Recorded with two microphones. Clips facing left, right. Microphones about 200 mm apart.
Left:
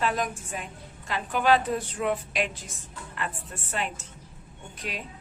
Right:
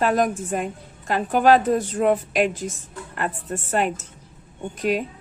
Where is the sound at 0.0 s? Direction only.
50° right (ahead or behind).